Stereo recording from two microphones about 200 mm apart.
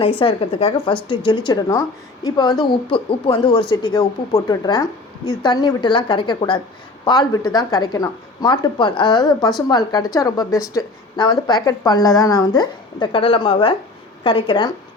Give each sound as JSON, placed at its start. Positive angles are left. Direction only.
{"t": 0.0, "sound": "a woman's voice", "side_deg": 25}